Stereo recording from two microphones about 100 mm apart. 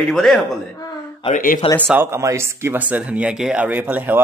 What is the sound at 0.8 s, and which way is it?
Speech, 40° left (ahead or behind).